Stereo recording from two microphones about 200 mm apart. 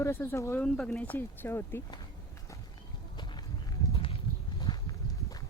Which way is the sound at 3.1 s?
20° left (ahead or behind).